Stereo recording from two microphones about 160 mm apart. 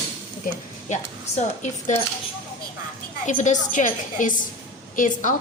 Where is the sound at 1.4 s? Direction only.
45° left (ahead or behind).